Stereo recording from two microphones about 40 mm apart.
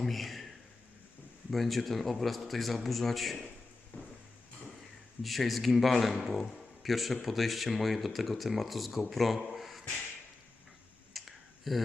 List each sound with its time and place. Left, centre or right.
0.0 s speech: centre
1.5 s speech: centre
3.9 s a sound: left
5.2 s speech: centre
11.1 s clicking: centre